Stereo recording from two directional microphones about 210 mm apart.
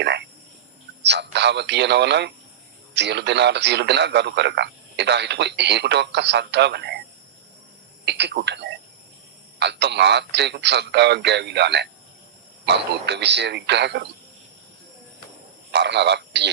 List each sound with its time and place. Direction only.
0.0 s a man's voice: 55° right (ahead or behind)
8.0 s a man's voice: 55° right (ahead or behind)
15.7 s speech: 55° right (ahead or behind)